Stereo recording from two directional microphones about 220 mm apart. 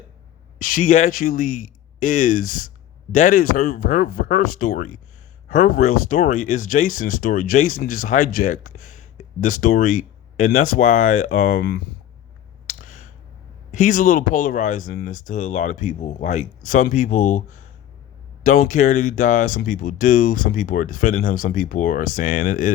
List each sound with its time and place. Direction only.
0.6 s speech: 40° left (ahead or behind)
12.6 s a sound: 35° left (ahead or behind)
13.7 s speech: 35° left (ahead or behind)